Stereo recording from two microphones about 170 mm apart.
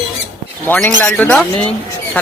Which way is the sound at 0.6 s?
10° left (ahead or behind).